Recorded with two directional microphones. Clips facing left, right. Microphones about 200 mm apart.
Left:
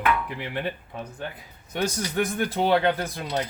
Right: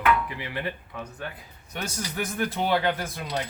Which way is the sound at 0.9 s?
25° left (ahead or behind).